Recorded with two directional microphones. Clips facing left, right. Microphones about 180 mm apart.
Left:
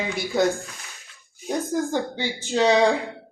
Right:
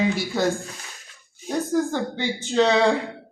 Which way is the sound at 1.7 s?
15° left (ahead or behind).